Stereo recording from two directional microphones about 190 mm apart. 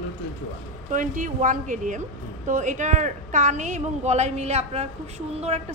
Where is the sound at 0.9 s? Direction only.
45° right (ahead or behind).